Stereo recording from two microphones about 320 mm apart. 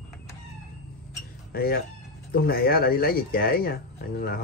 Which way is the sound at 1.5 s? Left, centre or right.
Left.